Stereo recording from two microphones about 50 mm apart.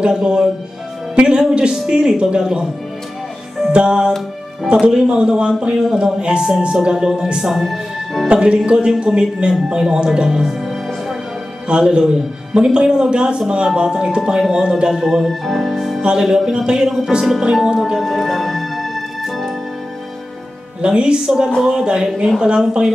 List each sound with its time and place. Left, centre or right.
0.0 s speech: centre
3.6 s music: centre
4.6 s speech: centre
7.4 s speech: centre
8.3 s speech: centre
16.0 s speech: centre
17.9 s music: centre
20.8 s speech: centre